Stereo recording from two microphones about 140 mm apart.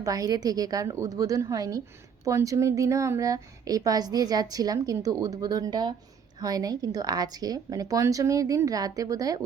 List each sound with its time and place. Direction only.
0.0 s a woman's voice: 25° right (ahead or behind)